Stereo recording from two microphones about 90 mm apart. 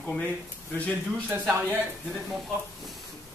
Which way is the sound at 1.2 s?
20° right (ahead or behind).